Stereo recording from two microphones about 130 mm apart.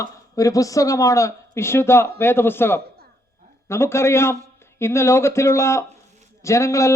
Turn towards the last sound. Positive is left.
turn(degrees=25)  # may be behind; listen again after turning